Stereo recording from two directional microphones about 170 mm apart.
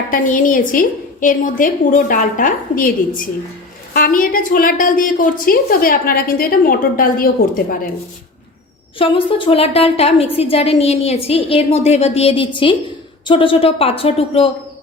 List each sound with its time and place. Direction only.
0.1 s a woman's voice: 50° left (ahead or behind)
3.9 s a woman's voice: 55° left (ahead or behind)
9.0 s a woman's voice: 30° left (ahead or behind)